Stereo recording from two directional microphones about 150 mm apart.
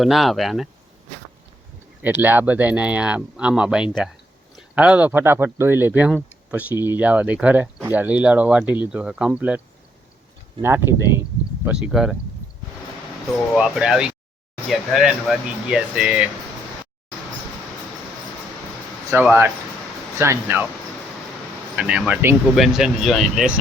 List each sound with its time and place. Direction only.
0.0 s speech: centre (ahead or behind)
2.0 s speech: 10° right (ahead or behind)
10.6 s speech: 15° right (ahead or behind)
11.6 s speech: 5° right (ahead or behind)
13.5 s speech: 5° right (ahead or behind)
19.1 s speech: 15° right (ahead or behind)
21.8 s speech: 10° right (ahead or behind)
22.5 s speech: 5° right (ahead or behind)